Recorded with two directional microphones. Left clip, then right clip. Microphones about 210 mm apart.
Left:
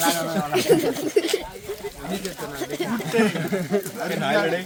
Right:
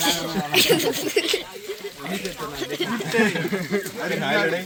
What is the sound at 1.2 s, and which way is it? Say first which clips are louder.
Speech: right 1 dB; 60° left (ahead or behind).